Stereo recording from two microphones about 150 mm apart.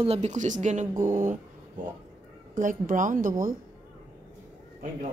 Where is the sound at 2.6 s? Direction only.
60° right (ahead or behind).